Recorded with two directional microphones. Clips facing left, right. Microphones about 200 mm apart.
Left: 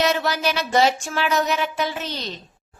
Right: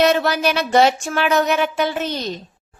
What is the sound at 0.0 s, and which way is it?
A woman's voice, 60° right (ahead or behind).